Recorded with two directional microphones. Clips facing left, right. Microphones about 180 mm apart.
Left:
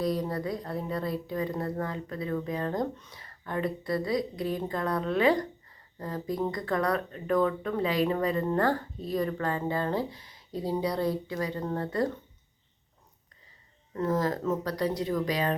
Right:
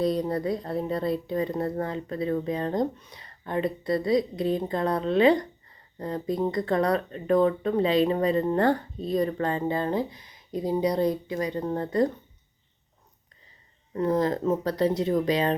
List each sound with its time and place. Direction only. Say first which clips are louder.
0.0 s speech: right 4 dB; 25° right (ahead or behind)
13.9 s speech: right 4 dB; 20° right (ahead or behind)